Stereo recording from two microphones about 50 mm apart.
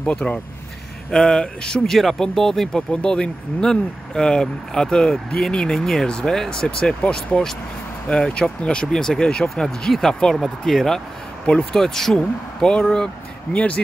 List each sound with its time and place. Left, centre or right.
0.0 s speech: left
1.1 s speech: centre
1.8 s speech: centre
2.9 s speech: centre